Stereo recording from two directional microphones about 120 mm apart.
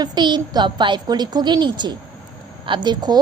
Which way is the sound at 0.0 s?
35° right (ahead or behind).